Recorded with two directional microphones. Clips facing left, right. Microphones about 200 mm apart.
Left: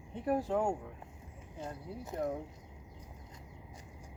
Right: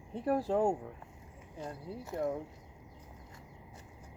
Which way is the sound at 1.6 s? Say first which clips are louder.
Right 1 dB; 20° left (ahead or behind).